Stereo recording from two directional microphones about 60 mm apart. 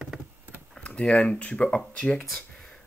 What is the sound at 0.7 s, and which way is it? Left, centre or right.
Speech, centre.